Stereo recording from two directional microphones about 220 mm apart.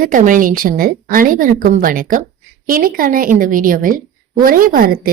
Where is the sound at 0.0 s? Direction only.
35° right (ahead or behind).